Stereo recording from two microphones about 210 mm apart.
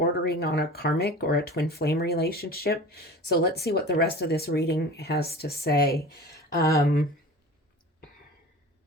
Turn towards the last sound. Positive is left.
turn(degrees=45)  # may be behind; listen again after turning